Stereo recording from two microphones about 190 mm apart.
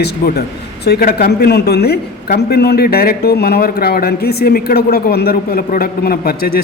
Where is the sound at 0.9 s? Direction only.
55° left (ahead or behind).